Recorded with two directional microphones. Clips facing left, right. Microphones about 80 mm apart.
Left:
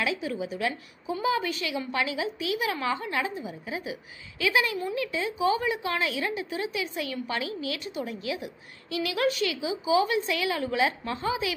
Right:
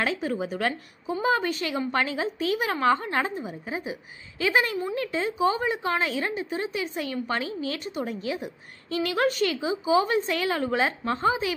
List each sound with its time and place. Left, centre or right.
0.0 s a woman's voice: right